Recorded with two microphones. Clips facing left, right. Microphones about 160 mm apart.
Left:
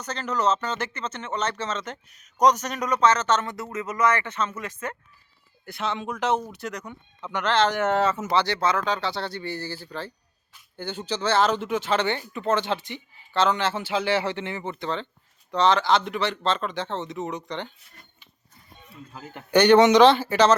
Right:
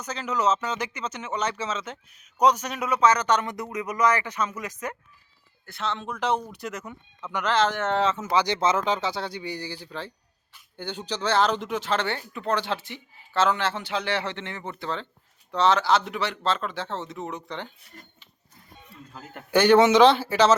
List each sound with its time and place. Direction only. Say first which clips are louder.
0.0 s speech: even; 10° right (ahead or behind)
5.6 s speech: left 2 dB; 10° left (ahead or behind); by 7.8 s 5° right (ahead or behind)
7.8 s speech: left 2 dB; 10° left (ahead or behind)
8.3 s speech: even; 15° right (ahead or behind)
9.5 s speech: left 1 dB; 5° left (ahead or behind)
19.1 s speech: left 2 dB; centre (ahead or behind)